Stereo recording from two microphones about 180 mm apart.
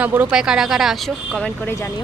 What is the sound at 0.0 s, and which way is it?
Speech, 10° right (ahead or behind).